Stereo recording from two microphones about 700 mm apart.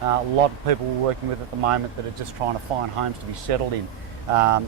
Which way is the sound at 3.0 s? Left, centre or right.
Right.